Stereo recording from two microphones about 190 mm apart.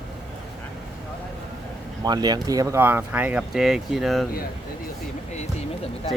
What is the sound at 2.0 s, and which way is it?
Speech, 20° right (ahead or behind).